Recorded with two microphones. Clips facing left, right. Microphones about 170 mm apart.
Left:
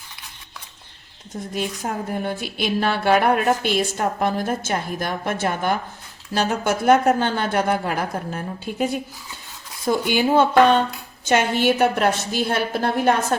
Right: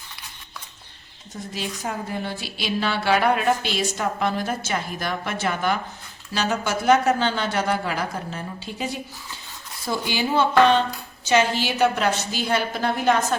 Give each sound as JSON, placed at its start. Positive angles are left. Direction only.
{"t": 1.5, "sound": "a woman's voice", "side_deg": 50}
{"t": 10.1, "sound": "a woman's voice", "side_deg": 50}